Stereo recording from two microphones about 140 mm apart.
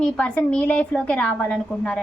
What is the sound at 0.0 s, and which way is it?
A woman's voice, 10° left (ahead or behind).